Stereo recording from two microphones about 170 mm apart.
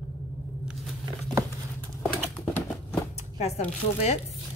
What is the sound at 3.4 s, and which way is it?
Speech, 40° left (ahead or behind).